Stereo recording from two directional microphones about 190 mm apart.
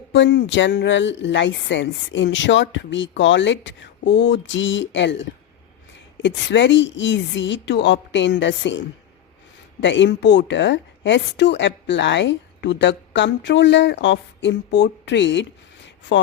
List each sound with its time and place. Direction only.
0.1 s a woman's voice: 65° left (ahead or behind)
6.2 s a woman's voice: 70° left (ahead or behind)
9.8 s a woman's voice: 70° left (ahead or behind)